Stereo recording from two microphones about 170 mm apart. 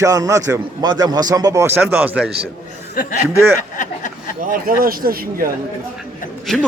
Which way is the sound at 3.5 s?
50° left (ahead or behind).